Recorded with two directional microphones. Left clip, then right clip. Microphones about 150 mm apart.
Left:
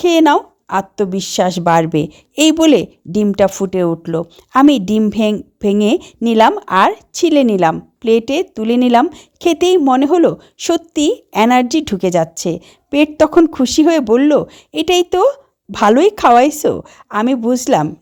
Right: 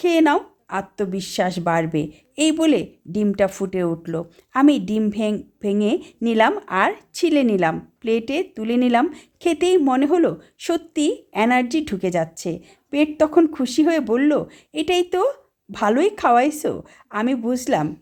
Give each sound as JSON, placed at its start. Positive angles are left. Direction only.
{"t": 0.0, "sound": "a woman's voice", "side_deg": 35}